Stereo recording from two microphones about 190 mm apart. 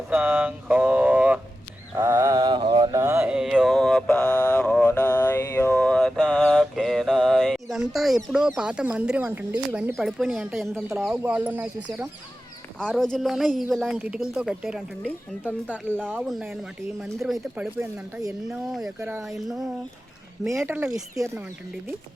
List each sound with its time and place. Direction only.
0.1 s a sound: 10° right (ahead or behind)
2.0 s mantra: 15° right (ahead or behind)
12.8 s speech: 5° left (ahead or behind)
17.7 s speech: 15° right (ahead or behind)
20.7 s speech: 10° right (ahead or behind)